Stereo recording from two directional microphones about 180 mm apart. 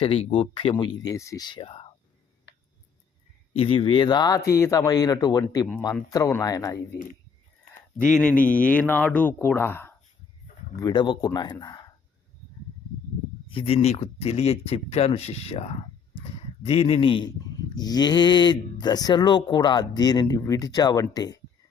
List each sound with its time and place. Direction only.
0.0 s speech: 30° left (ahead or behind)
2.5 s a sound: 75° left (ahead or behind)
3.5 s speech: 30° left (ahead or behind)
7.9 s speech: 5° left (ahead or behind)
10.8 s speech: 25° left (ahead or behind)
13.5 s speech: 30° left (ahead or behind)